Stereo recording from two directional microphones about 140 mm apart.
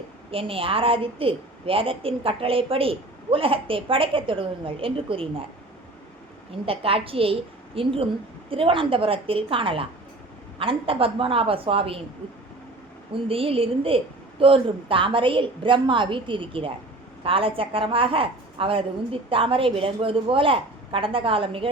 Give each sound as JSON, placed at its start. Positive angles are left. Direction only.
{"t": 0.3, "sound": "a woman's voice", "side_deg": -40}
{"t": 6.7, "sound": "a woman's voice", "side_deg": -40}
{"t": 13.2, "sound": "a woman's voice", "side_deg": -40}